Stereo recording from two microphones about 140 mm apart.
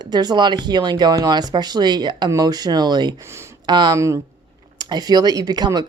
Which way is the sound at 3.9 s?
20° right (ahead or behind).